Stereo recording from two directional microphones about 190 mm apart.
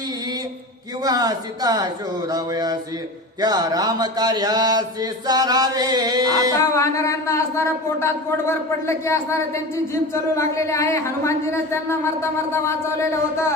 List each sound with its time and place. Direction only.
1.0 s speech: 20° right (ahead or behind)
2.3 s a sound: 20° right (ahead or behind)
6.7 s speech: 15° left (ahead or behind)